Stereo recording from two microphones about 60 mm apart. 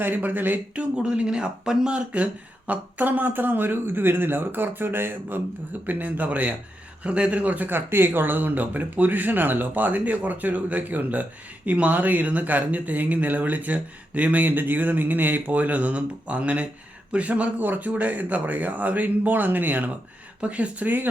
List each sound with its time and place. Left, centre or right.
0.0 s speech: right
0.9 s speech: centre